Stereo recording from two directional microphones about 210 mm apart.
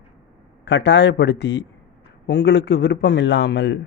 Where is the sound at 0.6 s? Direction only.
55° left (ahead or behind).